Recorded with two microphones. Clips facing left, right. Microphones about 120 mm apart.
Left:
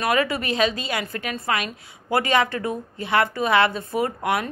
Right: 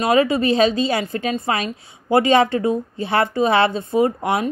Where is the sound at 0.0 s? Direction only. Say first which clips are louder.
Right 6 dB; 25° right (ahead or behind).